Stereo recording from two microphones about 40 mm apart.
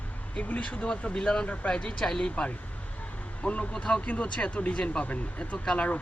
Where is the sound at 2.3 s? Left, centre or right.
Left.